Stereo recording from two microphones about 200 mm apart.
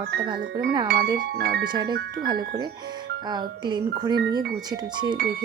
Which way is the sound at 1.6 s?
20° right (ahead or behind).